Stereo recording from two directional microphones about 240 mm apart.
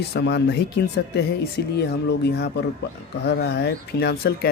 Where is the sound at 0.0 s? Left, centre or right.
Left.